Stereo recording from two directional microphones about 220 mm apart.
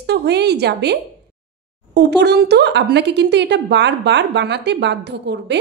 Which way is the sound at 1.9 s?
50° right (ahead or behind).